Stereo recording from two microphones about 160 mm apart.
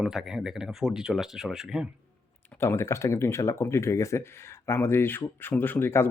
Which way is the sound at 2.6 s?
15° left (ahead or behind).